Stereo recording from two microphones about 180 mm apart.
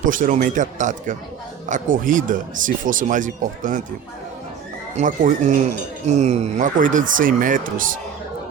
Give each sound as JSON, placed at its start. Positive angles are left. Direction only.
{"t": 0.0, "sound": "speech", "side_deg": -45}
{"t": 4.9, "sound": "speech", "side_deg": -45}